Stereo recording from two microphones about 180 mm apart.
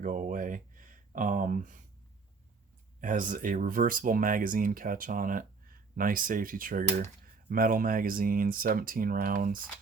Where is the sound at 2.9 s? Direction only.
50° right (ahead or behind).